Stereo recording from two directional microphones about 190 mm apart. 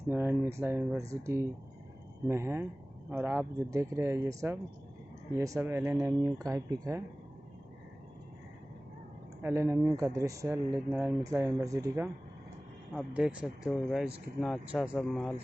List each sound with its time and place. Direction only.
0.1 s speech: 10° right (ahead or behind)
9.4 s speech: 15° right (ahead or behind)
12.9 s speech: 5° right (ahead or behind)